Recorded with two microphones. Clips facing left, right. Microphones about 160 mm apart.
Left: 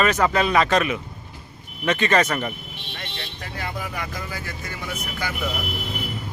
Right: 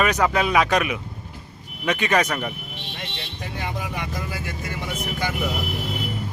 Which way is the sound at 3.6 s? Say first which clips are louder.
Right 1 dB; 20° right (ahead or behind).